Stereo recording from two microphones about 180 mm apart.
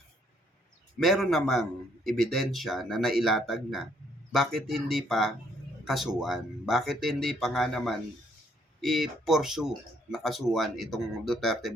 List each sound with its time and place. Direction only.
0.9 s speech: centre (ahead or behind)